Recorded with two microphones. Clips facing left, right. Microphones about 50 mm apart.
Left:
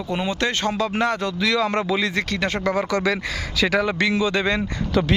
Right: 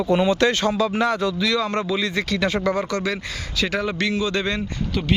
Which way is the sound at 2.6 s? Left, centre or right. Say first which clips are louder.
Even; left.